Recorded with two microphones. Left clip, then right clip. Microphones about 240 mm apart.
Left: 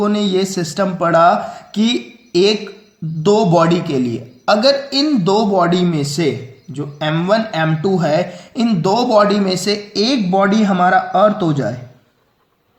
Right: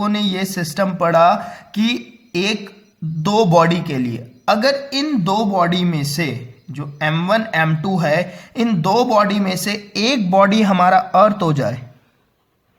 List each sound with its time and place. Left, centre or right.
0.0 s speech: right
11.3 s a man's voice: right